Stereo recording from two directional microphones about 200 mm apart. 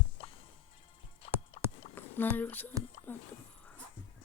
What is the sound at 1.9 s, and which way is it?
Speech, 10° left (ahead or behind).